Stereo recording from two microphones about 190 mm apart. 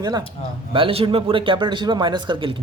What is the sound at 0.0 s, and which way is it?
A man's voice, 20° right (ahead or behind).